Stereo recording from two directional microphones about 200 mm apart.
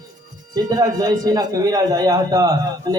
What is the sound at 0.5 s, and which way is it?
A man's voice, 20° right (ahead or behind).